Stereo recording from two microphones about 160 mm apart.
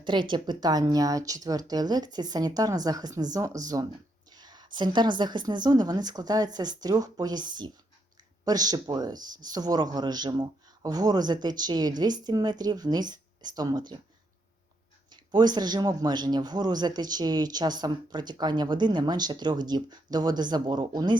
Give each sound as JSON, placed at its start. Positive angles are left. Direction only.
{"t": 0.0, "sound": "a man's voice", "side_deg": -30}
{"t": 15.1, "sound": "a man's voice", "side_deg": -25}